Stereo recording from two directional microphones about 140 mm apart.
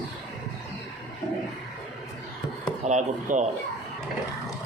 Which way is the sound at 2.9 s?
60° right (ahead or behind).